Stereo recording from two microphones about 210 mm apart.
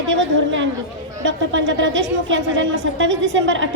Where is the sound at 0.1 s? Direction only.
60° right (ahead or behind).